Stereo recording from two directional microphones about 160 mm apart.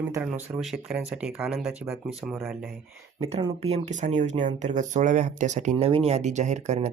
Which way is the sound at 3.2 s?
40° right (ahead or behind).